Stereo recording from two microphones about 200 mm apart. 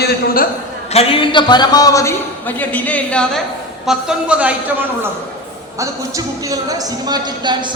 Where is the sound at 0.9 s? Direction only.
25° left (ahead or behind); by 4.8 s 5° right (ahead or behind).